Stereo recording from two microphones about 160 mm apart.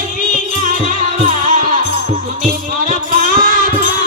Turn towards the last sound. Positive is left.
turn(degrees=-55)  # may be behind; listen again after turning